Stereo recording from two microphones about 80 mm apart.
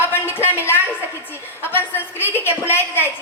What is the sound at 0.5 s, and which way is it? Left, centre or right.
A woman's voice, left.